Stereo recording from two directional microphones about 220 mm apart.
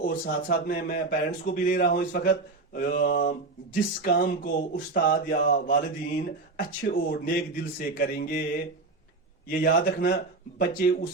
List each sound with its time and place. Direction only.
0.0 s speech: 45° left (ahead or behind)
9.5 s speech: 40° left (ahead or behind)